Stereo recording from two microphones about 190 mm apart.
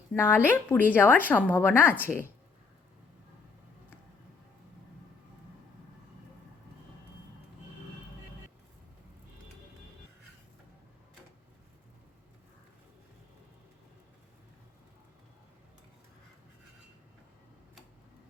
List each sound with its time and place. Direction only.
0.2 s speech: 10° left (ahead or behind)